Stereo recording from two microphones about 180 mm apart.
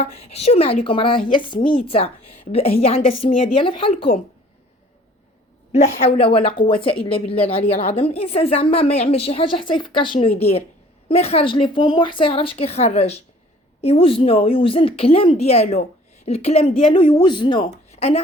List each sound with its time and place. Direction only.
0.0 s a woman's voice: 35° left (ahead or behind)
5.7 s a woman's voice: 35° left (ahead or behind)
17.6 s speech: 35° left (ahead or behind)